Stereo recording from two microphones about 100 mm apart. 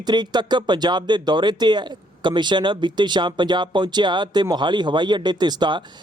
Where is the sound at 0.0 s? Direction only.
45° right (ahead or behind).